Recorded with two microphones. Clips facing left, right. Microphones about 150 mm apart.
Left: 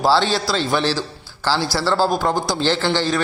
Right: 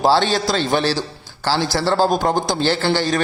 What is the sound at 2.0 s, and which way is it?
A man's voice, 20° right (ahead or behind).